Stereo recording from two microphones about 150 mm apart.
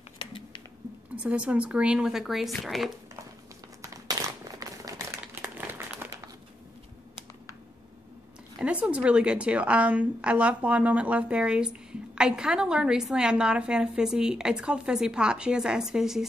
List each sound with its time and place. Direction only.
0.2 s squish: 35° left (ahead or behind)
1.1 s a woman's voice: 10° right (ahead or behind)
3.8 s crumpling: 25° right (ahead or behind)
8.5 s a woman's voice: 10° right (ahead or behind)